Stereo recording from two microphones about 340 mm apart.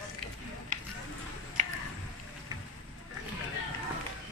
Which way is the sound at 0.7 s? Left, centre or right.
Right.